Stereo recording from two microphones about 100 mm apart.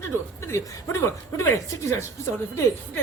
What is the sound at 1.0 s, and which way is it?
Speech, 30° left (ahead or behind).